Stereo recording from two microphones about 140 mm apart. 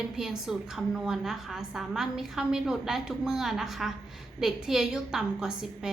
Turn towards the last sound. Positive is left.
turn(degrees=-5)  # may be behind; listen again after turning